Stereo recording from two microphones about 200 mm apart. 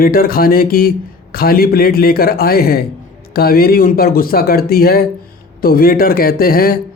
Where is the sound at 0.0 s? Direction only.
45° left (ahead or behind).